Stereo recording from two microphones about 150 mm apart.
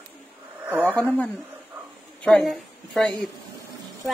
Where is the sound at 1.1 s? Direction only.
10° left (ahead or behind).